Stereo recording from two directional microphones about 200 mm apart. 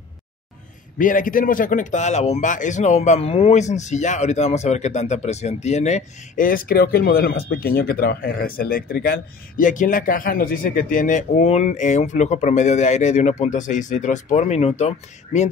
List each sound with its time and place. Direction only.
0.9 s speech: 40° left (ahead or behind)